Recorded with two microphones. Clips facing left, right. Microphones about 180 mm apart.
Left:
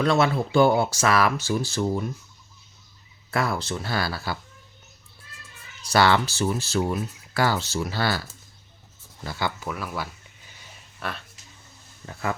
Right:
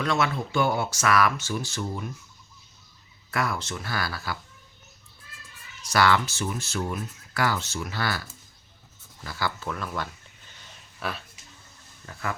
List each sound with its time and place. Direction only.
0.0 s speech: 35° left (ahead or behind)
3.3 s speech: 30° left (ahead or behind)
5.8 s speech: 30° left (ahead or behind)
9.6 s speech: 5° left (ahead or behind)